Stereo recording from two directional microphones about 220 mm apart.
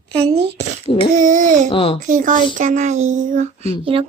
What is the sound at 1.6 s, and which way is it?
Speech, 25° left (ahead or behind).